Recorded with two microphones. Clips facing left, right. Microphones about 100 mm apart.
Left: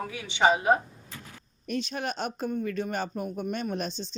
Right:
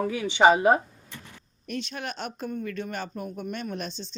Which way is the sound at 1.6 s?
25° left (ahead or behind).